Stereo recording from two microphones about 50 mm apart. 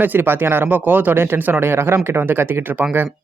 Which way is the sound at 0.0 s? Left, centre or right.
Right.